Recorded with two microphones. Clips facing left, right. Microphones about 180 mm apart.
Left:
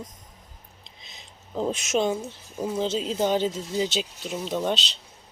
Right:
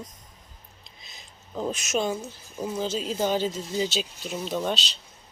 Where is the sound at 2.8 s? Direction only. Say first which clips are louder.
Left 2 dB; 25° left (ahead or behind).